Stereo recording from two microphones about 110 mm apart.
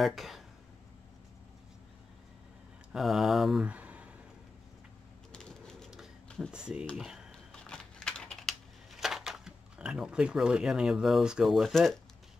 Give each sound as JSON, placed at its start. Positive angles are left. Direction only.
{"t": 0.0, "sound": "speech", "side_deg": 0}
{"t": 2.9, "sound": "speech", "side_deg": -5}
{"t": 5.3, "sound": "a sound", "side_deg": 5}
{"t": 6.5, "sound": "speech", "side_deg": -10}
{"t": 7.0, "sound": "a sound", "side_deg": -5}
{"t": 7.5, "sound": "typing", "side_deg": 5}